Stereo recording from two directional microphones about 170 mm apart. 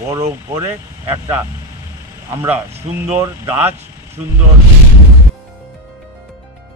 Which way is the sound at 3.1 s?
15° right (ahead or behind).